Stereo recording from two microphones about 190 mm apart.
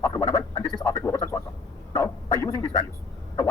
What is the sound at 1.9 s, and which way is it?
Bow-wow, 15° left (ahead or behind).